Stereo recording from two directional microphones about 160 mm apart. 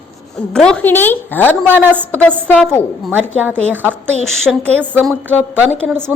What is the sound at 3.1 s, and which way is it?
Speech, 10° right (ahead or behind).